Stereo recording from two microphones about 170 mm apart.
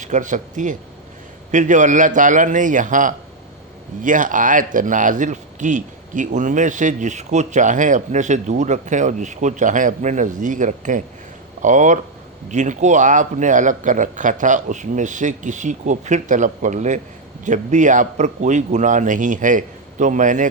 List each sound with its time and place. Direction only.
0.0 s speech: 50° right (ahead or behind)